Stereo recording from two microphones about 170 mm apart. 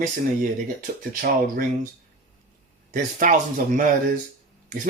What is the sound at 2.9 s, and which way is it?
Speech, 50° right (ahead or behind).